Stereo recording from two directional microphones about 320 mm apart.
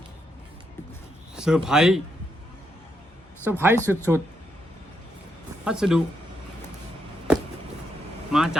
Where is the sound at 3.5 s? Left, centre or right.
Centre.